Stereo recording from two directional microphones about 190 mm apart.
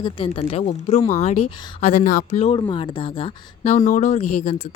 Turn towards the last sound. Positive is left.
turn(degrees=40)  # may be behind; listen again after turning